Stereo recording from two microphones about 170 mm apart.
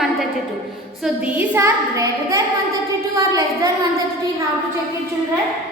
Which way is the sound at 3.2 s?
20° right (ahead or behind).